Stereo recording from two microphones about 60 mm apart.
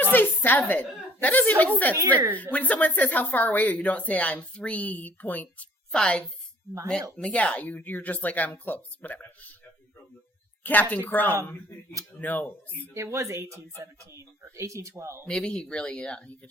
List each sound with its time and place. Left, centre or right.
0.0 s a woman's voice: left
5.9 s speech: centre
10.6 s speech: left
12.9 s speech: right
15.3 s speech: centre